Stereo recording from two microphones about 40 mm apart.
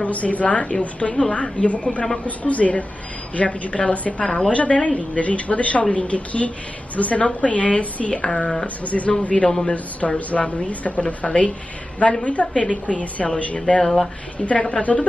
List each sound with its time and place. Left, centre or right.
0.0 s a woman's voice: left
8.8 s a woman's voice: left
9.5 s speech: centre
9.9 s a woman's voice: left
11.2 s a woman's voice: left
13.2 s a woman's voice: centre
13.7 s a woman's voice: left
14.9 s speech: centre